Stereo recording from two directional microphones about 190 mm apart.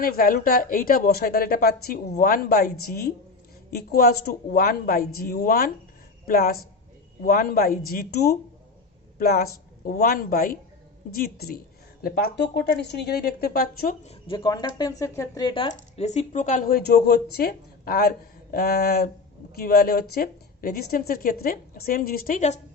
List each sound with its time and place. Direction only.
0.0 s a woman's voice: 50° left (ahead or behind)
14.0 s speech: 30° left (ahead or behind)
15.7 s a woman's voice: 35° left (ahead or behind)